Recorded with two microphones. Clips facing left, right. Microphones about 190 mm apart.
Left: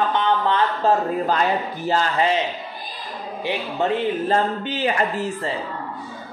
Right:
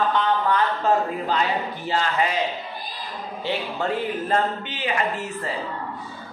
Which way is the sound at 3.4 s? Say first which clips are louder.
Left 3 dB; 20° left (ahead or behind).